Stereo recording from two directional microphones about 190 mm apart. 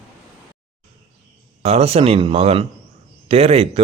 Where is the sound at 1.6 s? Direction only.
30° right (ahead or behind).